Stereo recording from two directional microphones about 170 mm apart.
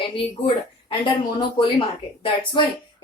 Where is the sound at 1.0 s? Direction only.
30° left (ahead or behind).